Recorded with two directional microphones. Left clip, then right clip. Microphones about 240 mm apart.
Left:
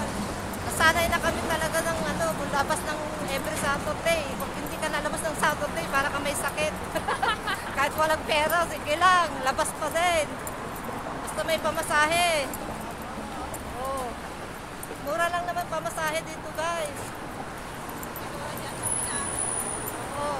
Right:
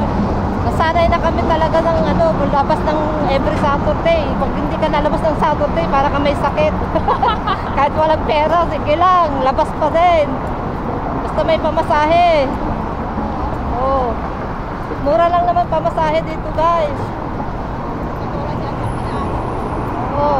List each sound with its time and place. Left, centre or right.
0.7 s speech: centre
7.7 s speech: centre
11.3 s speech: centre
15.1 s speech: centre